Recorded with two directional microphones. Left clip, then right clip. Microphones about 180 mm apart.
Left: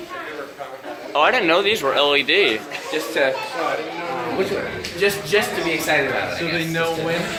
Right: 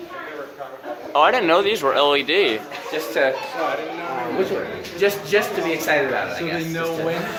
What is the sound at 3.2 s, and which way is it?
Speech, 60° right (ahead or behind).